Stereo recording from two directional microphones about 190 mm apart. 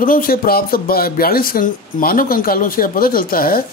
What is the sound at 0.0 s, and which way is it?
Speech, 50° left (ahead or behind).